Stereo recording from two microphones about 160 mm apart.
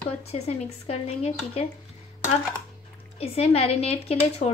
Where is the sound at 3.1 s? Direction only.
40° left (ahead or behind).